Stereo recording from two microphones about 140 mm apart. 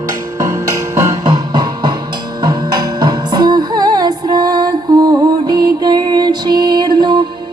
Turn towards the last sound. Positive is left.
turn(degrees=-30)  # may be behind; listen again after turning